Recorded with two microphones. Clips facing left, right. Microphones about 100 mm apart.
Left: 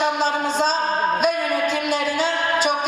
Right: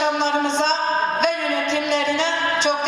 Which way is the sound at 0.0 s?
5° left (ahead or behind).